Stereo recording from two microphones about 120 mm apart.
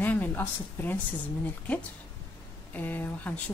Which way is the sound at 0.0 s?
15° left (ahead or behind).